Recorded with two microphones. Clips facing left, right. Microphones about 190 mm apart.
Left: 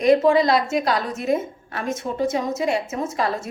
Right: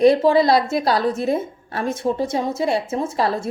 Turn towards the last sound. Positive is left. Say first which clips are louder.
# right 3 dB
turn(degrees=-30)  # may be behind; listen again after turning